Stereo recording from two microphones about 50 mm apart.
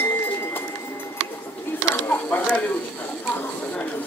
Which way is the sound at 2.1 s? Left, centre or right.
Left.